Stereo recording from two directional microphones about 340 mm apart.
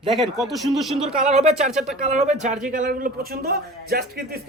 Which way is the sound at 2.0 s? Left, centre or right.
Centre.